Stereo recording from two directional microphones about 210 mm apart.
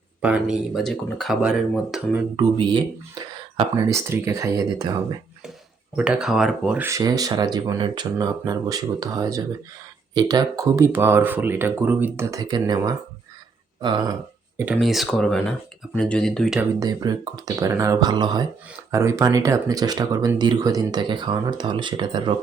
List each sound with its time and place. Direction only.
0.2 s speech: 5° right (ahead or behind)
2.3 s speech: 20° right (ahead or behind)
6.0 s speech: 5° right (ahead or behind)
14.6 s speech: 5° right (ahead or behind)
16.8 s speech: 20° right (ahead or behind)